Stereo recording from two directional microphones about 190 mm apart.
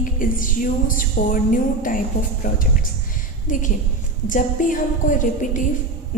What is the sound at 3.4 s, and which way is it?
A woman's voice, 40° left (ahead or behind).